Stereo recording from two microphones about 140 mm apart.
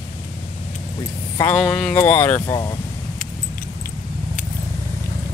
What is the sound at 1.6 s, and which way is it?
Speech, 5° left (ahead or behind).